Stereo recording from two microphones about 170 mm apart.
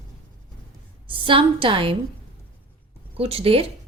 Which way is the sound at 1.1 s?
30° right (ahead or behind).